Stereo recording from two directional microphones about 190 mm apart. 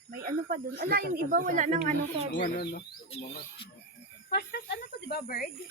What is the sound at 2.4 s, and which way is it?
Speech, 50° left (ahead or behind).